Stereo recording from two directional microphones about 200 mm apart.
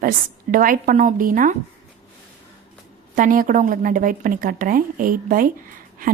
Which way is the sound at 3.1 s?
40° right (ahead or behind).